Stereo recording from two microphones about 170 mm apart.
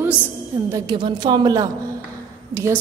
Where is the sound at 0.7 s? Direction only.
20° right (ahead or behind).